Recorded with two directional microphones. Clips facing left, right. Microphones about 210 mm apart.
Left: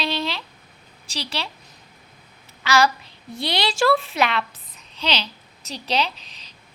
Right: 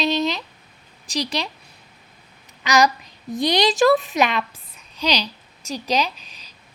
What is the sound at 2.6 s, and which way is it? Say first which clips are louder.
A woman's voice: right 1 dB; 15° right (ahead or behind).